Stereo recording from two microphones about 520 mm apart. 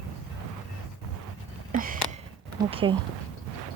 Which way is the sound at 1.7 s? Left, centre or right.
Centre.